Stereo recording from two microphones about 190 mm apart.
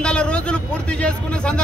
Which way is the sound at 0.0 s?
5° left (ahead or behind).